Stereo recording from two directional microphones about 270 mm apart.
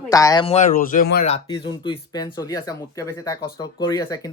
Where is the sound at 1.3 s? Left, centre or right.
Centre.